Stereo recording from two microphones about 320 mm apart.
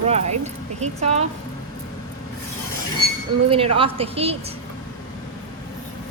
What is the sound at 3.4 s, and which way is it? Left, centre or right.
Speech, centre.